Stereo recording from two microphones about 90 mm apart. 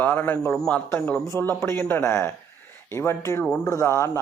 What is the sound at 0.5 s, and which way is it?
Speech, 5° left (ahead or behind).